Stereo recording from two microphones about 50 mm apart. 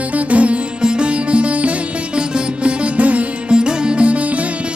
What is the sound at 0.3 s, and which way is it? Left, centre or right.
Music, right.